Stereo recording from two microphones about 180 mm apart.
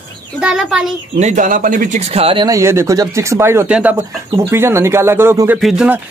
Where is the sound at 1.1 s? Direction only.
40° right (ahead or behind).